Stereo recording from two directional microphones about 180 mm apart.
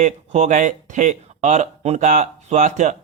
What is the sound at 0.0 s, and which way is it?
Speech, 40° right (ahead or behind).